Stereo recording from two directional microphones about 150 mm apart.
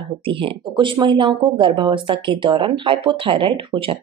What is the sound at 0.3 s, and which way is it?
Speech, 35° right (ahead or behind).